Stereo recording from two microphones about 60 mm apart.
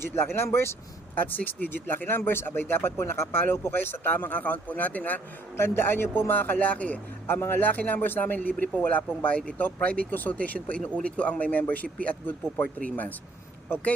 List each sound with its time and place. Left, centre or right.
0.3 s speech: left
1.1 s speech: left
5.5 s speech: left
7.3 s speech: left